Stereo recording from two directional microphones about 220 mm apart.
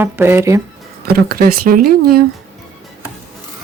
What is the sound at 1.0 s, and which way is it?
Speech, 45° right (ahead or behind).